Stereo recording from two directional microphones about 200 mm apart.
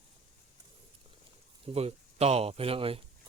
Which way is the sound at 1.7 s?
30° right (ahead or behind).